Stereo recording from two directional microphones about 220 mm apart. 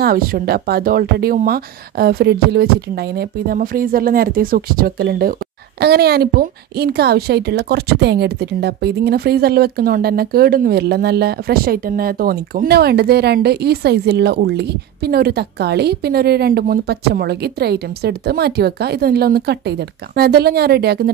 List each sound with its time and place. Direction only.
0.0 s a woman's voice: 40° right (ahead or behind)